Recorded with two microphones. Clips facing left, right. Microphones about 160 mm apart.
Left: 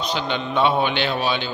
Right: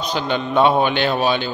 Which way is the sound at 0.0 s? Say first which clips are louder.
Right 3 dB; 45° right (ahead or behind).